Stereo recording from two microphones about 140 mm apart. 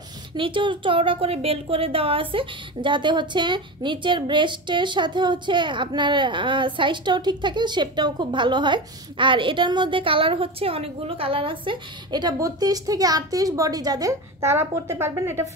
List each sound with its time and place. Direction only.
0.4 s a woman's voice: 35° right (ahead or behind); by 15.4 s 20° right (ahead or behind)